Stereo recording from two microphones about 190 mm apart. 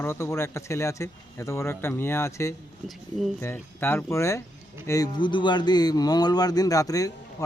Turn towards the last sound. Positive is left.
turn(degrees=20)  # may be behind; listen again after turning